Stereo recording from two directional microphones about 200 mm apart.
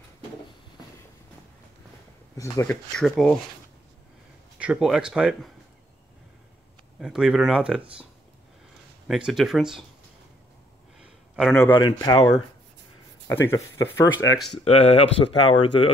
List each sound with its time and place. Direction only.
2.3 s speech: 15° left (ahead or behind)
4.6 s speech: 5° right (ahead or behind)
7.0 s speech: centre (ahead or behind)
9.0 s speech: centre (ahead or behind)
11.0 s a sound: 5° right (ahead or behind)
11.6 s speech: 20° left (ahead or behind)
13.5 s speech: 15° left (ahead or behind)
14.6 s speech: 30° left (ahead or behind)